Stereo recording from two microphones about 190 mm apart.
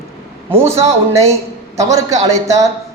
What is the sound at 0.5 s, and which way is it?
A man's voice, 15° right (ahead or behind).